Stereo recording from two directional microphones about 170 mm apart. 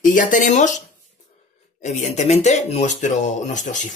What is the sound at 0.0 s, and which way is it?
Speech, 50° left (ahead or behind).